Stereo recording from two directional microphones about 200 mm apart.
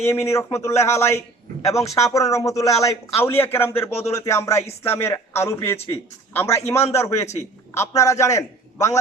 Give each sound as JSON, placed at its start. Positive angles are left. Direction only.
{"t": 0.0, "sound": "a man's voice", "side_deg": 15}